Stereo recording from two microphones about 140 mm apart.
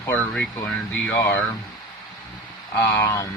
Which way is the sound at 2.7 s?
25° left (ahead or behind).